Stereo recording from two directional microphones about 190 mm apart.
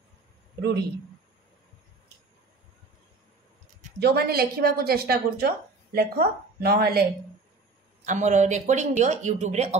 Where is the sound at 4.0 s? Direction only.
55° right (ahead or behind).